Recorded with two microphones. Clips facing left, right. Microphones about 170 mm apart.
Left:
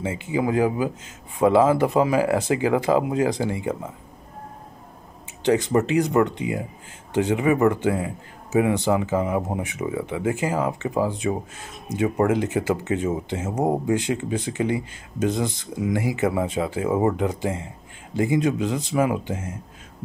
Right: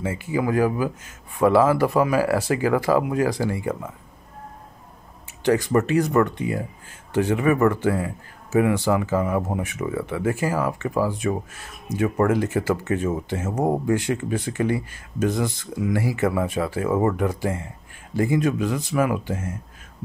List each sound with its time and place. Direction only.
0.0 s speech: 20° left (ahead or behind)
5.4 s speech: 20° left (ahead or behind)